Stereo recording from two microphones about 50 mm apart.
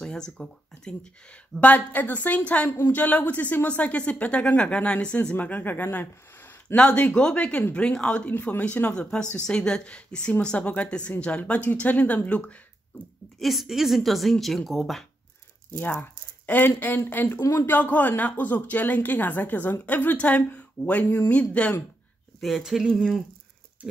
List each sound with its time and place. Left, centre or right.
0.0 s speech: centre
1.6 s a woman's voice: left
6.7 s a woman's voice: left
8.9 s a woman's voice: left
13.4 s a woman's voice: centre
15.8 s speech: left
17.6 s a woman's voice: left
22.6 s a woman's voice: centre